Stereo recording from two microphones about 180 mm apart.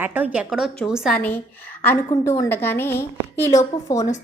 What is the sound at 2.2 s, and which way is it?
A woman's voice, 15° left (ahead or behind).